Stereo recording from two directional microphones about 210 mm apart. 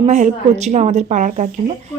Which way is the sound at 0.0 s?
35° right (ahead or behind).